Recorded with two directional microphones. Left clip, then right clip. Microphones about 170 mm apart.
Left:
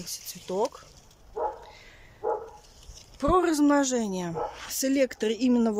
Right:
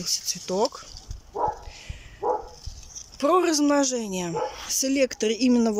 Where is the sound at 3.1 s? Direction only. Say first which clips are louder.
Right 3 dB; 5° right (ahead or behind).